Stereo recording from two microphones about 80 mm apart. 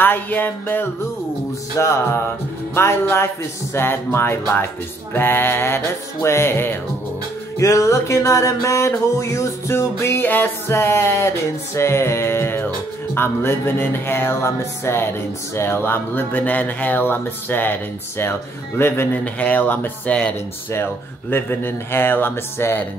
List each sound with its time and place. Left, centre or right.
0.0 s speech: left
1.8 s music: left
3.7 s speech: left
6.2 s music: left
7.5 s music: left
13.1 s speech: left
18.8 s music: left
19.1 s speech: centre